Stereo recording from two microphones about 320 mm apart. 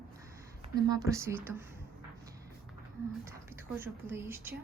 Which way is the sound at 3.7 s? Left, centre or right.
Centre.